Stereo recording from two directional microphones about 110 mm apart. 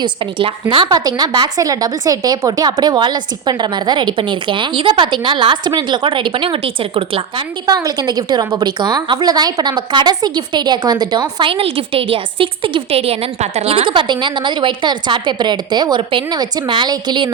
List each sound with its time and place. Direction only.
0.0 s a woman's voice: 50° right (ahead or behind)
7.7 s a woman's voice: 35° right (ahead or behind)
11.4 s a woman's voice: 55° right (ahead or behind)